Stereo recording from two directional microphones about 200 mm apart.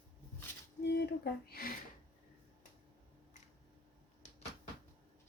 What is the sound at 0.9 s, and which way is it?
Speech, 55° left (ahead or behind).